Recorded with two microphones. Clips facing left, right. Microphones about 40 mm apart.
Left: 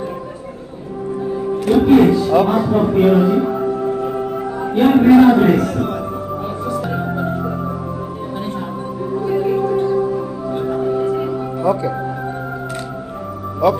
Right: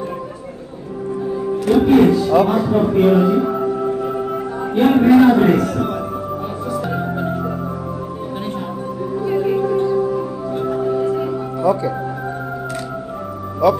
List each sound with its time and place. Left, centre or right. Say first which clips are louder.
1.3 s speech: even; centre
6.7 s organ: even; centre
9.1 s music: left 1 dB; centre
9.5 s gong: even; centre
10.6 s music: even; centre
11.6 s music: right 1 dB; left